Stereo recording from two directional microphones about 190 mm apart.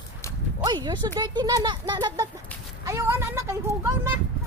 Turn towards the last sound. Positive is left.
turn(degrees=-10)  # may be behind; listen again after turning